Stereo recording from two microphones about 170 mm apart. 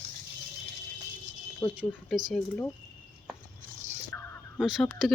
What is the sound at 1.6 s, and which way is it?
Speech, 20° left (ahead or behind).